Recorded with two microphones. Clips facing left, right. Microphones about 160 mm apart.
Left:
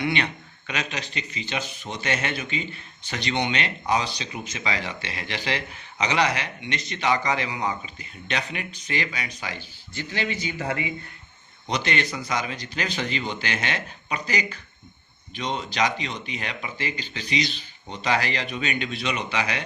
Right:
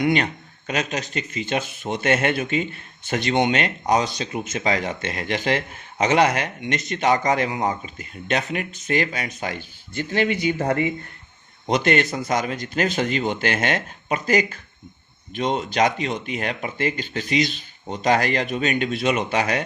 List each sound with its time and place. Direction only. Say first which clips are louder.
0.0 s speech: right 5 dB; 40° right (ahead or behind)